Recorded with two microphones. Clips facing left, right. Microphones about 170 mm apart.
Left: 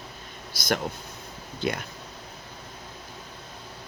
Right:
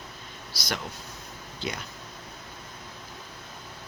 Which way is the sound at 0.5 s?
50° left (ahead or behind).